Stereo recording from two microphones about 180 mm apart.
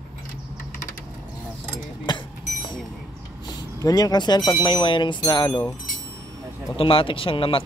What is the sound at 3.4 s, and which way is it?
Speech, 20° left (ahead or behind).